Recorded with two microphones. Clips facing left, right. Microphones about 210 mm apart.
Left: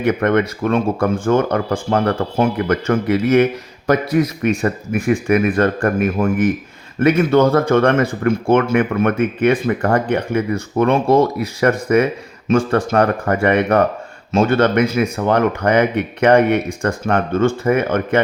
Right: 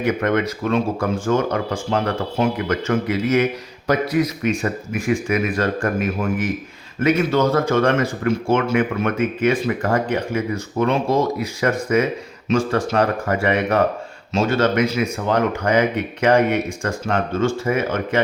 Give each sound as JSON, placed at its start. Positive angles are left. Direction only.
{"t": 0.0, "sound": "speech", "side_deg": 55}